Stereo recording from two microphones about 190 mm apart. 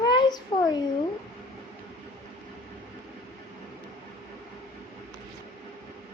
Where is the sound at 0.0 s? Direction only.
25° left (ahead or behind).